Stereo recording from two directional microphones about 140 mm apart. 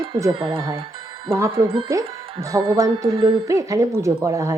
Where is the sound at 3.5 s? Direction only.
25° right (ahead or behind).